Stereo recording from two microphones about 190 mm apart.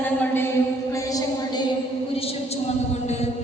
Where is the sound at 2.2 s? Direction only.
30° left (ahead or behind).